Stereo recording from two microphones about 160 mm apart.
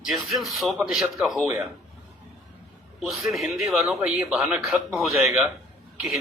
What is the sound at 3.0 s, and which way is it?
A man's voice, centre (ahead or behind).